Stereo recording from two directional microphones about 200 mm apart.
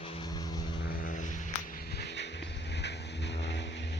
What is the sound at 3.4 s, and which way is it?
Vehicle, 60° left (ahead or behind).